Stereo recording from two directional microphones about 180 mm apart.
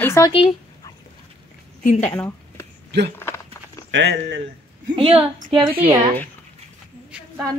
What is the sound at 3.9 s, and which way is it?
Speech, 80° right.